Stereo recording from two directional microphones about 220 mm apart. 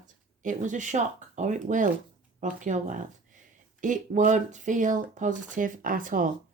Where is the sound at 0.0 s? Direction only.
35° right (ahead or behind).